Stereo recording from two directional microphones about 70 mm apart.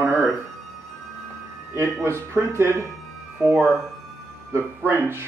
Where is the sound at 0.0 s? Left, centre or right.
Right.